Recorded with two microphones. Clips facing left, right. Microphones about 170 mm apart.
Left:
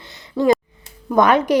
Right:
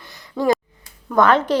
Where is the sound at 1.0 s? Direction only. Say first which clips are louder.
Left 1 dB; 15° left (ahead or behind).